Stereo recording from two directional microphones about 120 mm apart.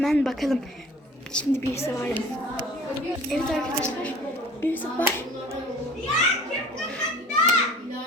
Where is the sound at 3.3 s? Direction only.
5° left (ahead or behind).